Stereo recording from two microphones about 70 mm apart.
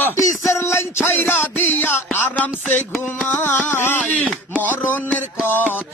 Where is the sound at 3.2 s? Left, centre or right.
Left.